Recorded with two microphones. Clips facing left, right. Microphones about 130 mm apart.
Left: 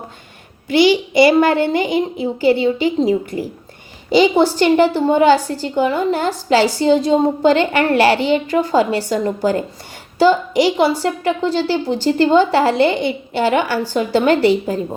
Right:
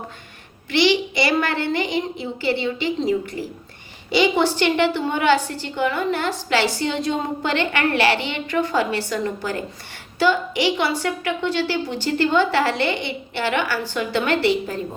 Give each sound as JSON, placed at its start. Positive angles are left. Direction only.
{"t": 0.7, "sound": "a child's voice", "side_deg": 50}
{"t": 4.1, "sound": "a woman's voice", "side_deg": 40}